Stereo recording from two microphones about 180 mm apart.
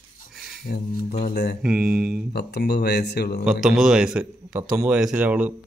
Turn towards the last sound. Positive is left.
turn(degrees=-10)  # may be behind; listen again after turning